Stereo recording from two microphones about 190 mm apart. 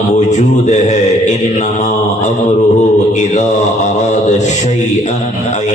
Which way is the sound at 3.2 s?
40° left (ahead or behind).